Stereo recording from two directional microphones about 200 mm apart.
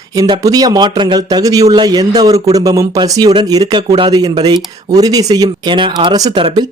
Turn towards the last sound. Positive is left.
turn(degrees=-25)  # may be behind; listen again after turning